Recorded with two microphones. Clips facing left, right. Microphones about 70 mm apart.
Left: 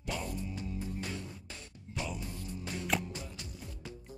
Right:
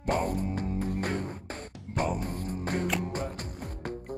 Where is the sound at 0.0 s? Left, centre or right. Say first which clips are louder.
Right 10 dB; right.